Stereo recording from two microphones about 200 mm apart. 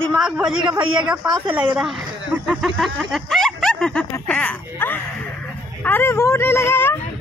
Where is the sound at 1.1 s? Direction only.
10° right (ahead or behind).